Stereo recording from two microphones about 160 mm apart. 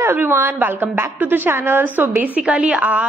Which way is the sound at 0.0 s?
15° right (ahead or behind).